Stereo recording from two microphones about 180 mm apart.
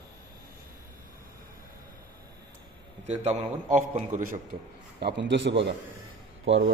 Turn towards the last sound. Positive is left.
turn(degrees=-90)